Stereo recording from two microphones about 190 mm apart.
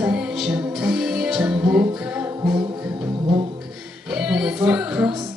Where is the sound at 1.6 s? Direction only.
20° right (ahead or behind).